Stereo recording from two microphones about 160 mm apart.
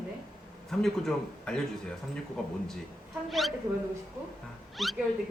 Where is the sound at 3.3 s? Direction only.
Centre (ahead or behind).